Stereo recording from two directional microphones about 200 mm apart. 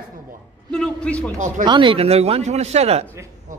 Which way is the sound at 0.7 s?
5° left (ahead or behind).